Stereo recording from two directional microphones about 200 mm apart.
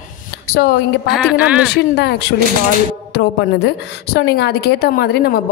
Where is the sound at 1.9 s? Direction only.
55° left (ahead or behind).